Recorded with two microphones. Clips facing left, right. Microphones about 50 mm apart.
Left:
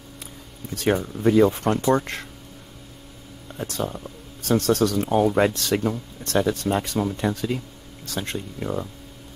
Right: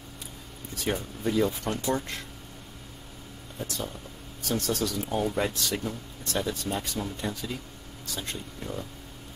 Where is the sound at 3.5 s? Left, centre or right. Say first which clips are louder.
Left 7 dB; left.